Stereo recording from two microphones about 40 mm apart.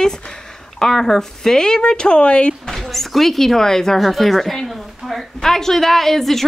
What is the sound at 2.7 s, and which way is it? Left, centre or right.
Speech, centre.